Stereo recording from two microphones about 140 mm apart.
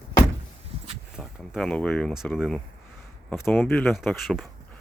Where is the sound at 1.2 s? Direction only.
Centre (ahead or behind).